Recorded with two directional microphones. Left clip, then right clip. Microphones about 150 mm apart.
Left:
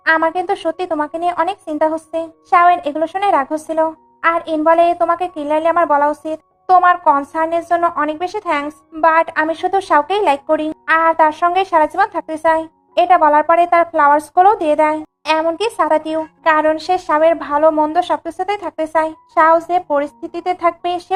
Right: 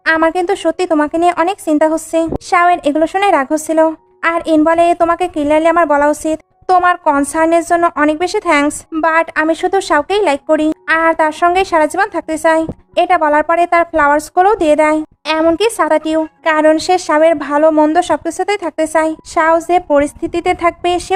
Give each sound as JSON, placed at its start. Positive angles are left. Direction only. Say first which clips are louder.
{"t": 0.0, "sound": "speech", "louder": "right 2 dB", "side_deg": -35}